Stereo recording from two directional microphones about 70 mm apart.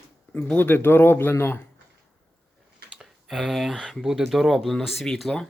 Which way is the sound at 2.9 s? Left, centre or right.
Centre.